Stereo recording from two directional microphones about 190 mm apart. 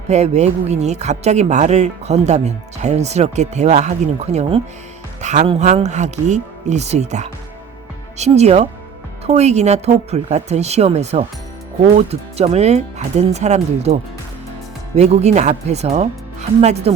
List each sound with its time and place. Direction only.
0.1 s speech: 35° right (ahead or behind)
14.9 s speech: 35° right (ahead or behind)